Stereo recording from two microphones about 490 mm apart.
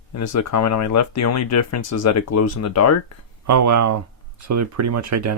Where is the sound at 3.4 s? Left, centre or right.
Right.